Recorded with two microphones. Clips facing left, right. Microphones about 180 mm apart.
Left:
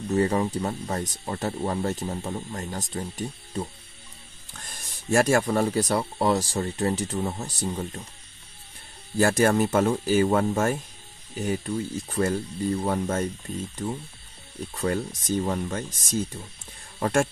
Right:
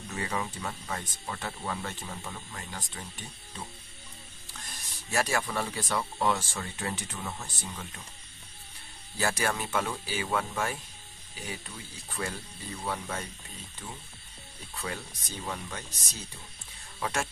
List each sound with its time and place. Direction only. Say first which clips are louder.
0.1 s speech: left 12 dB; 40° left (ahead or behind)
4.6 s speech: left 3 dB; 50° left (ahead or behind)
9.2 s speech: left 10 dB; 45° left (ahead or behind)
14.7 s speech: left 11 dB; 45° left (ahead or behind)